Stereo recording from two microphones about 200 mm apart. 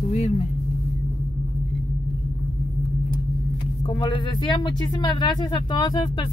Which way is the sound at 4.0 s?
20° left (ahead or behind).